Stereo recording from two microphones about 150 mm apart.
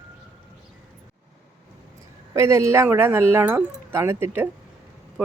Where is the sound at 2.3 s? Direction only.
20° right (ahead or behind).